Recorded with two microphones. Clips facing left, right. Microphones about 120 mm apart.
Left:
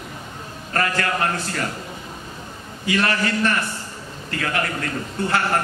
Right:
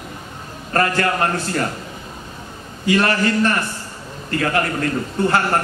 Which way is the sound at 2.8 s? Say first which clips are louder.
Right 4 dB; 40° right (ahead or behind).